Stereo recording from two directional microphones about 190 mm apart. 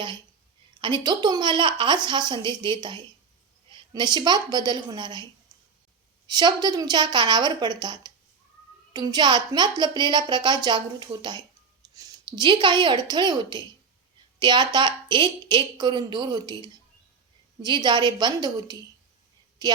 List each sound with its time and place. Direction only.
0.7 s a woman's voice: 25° right (ahead or behind)
6.2 s a woman's voice: 20° right (ahead or behind)